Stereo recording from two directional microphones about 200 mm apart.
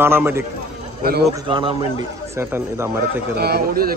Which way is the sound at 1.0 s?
50° right (ahead or behind).